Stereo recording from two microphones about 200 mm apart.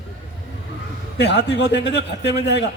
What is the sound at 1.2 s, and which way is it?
A man's voice, 60° left (ahead or behind).